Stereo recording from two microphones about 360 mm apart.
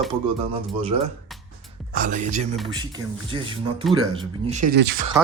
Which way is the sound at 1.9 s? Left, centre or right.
Right.